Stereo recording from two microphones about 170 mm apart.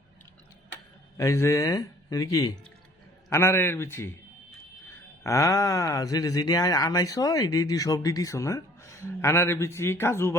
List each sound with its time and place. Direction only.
1.1 s a man's voice: 15° left (ahead or behind)